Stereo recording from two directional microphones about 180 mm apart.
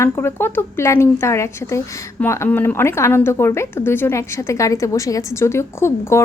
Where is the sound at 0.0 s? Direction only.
15° left (ahead or behind).